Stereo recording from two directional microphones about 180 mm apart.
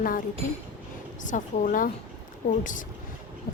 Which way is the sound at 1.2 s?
45° left (ahead or behind).